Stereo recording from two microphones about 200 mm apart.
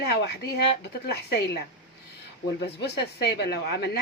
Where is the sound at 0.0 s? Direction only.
55° left (ahead or behind).